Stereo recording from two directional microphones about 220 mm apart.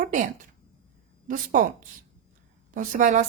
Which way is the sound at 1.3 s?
35° right (ahead or behind).